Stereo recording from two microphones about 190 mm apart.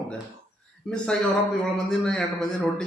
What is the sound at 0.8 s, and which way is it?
A man's voice, 5° left (ahead or behind).